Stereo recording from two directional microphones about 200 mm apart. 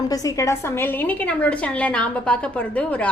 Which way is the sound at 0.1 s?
15° left (ahead or behind).